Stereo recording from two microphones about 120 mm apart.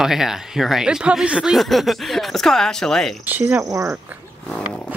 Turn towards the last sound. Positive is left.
turn(degrees=5)  # may be behind; listen again after turning